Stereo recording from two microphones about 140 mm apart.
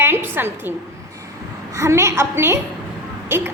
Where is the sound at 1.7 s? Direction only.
20° right (ahead or behind).